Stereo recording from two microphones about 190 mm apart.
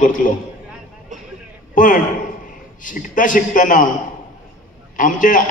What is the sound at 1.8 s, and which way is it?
A man's voice, 45° left (ahead or behind).